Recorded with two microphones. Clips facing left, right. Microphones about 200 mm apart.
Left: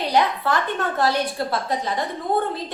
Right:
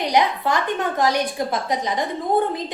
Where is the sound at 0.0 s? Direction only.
15° right (ahead or behind).